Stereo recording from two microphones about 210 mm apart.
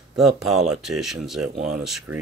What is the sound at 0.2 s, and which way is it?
Speech, centre (ahead or behind).